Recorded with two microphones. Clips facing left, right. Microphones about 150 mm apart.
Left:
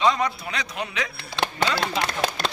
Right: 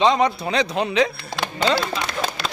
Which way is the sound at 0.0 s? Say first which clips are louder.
Right 5 dB; 25° right (ahead or behind).